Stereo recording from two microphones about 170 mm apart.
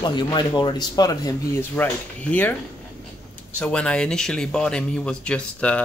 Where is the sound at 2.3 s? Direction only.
5° left (ahead or behind).